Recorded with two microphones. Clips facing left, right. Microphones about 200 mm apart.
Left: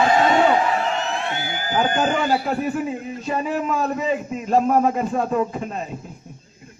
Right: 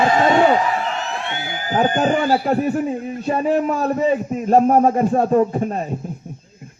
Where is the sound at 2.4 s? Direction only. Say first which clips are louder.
Right 4 dB; 45° right (ahead or behind).